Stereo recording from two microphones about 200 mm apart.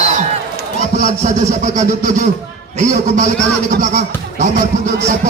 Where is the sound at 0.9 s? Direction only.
40° right (ahead or behind).